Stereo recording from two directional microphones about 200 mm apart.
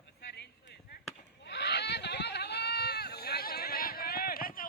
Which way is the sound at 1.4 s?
55° left (ahead or behind).